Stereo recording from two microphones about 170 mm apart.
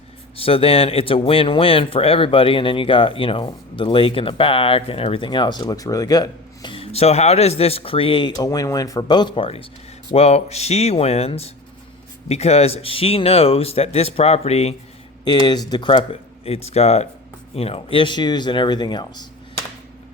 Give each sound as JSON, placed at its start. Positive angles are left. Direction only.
{"t": 0.3, "sound": "speech", "side_deg": 35}
{"t": 15.2, "sound": "speech", "side_deg": 25}